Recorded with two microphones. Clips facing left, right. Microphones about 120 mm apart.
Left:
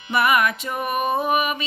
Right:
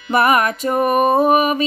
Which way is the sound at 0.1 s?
40° right (ahead or behind).